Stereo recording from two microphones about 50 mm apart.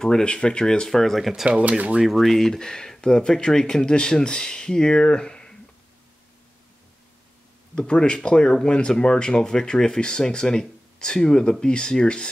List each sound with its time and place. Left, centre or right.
0.0 s speech: centre
1.3 s speech: centre
1.6 s speech: right
2.0 s speech: centre
7.7 s speech: centre